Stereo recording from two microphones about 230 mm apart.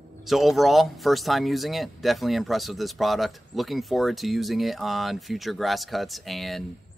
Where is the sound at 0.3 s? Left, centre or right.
Centre.